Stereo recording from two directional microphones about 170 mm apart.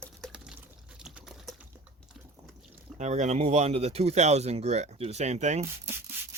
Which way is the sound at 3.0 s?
45° right (ahead or behind).